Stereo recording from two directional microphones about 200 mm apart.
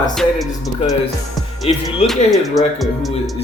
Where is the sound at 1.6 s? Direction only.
30° left (ahead or behind).